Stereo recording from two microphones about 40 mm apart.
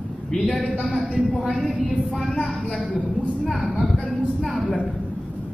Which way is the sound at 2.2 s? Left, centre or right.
Left.